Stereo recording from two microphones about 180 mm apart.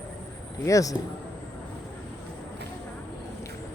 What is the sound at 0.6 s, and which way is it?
Speech, 20° left (ahead or behind).